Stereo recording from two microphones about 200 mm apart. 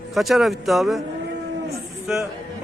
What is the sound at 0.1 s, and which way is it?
Speech, centre (ahead or behind).